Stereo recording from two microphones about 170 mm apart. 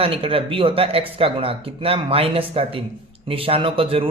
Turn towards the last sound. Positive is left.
turn(degrees=-30)  # may be behind; listen again after turning